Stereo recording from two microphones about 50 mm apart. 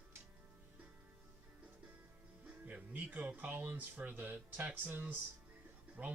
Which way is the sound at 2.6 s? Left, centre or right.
Right.